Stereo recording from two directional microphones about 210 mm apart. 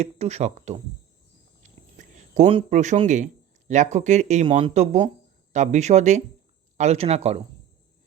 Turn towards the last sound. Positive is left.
turn(degrees=-30)  # may be behind; listen again after turning